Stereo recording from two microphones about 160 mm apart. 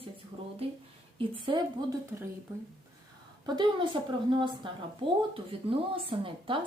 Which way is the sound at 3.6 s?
30° right (ahead or behind).